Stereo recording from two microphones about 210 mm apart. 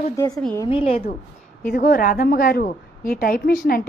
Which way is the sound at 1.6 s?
45° left (ahead or behind).